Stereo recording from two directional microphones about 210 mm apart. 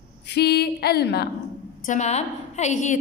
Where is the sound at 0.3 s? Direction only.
50° left (ahead or behind).